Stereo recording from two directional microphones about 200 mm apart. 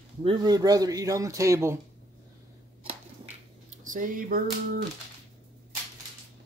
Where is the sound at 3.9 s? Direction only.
40° right (ahead or behind).